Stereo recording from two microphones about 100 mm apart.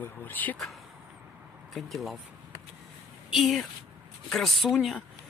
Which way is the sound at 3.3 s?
5° right (ahead or behind).